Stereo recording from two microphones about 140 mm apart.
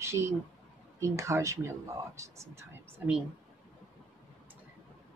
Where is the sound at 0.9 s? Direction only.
20° right (ahead or behind).